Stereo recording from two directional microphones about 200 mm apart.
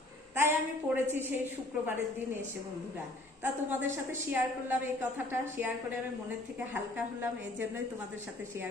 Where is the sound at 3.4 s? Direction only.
10° right (ahead or behind).